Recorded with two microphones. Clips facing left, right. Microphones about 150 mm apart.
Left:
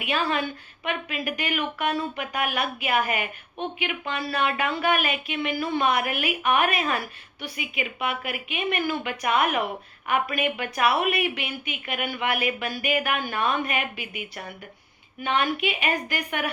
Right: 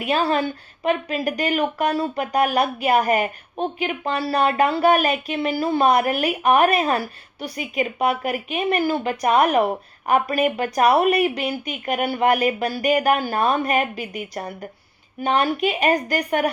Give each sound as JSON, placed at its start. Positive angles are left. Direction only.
{"t": 0.0, "sound": "speech", "side_deg": -35}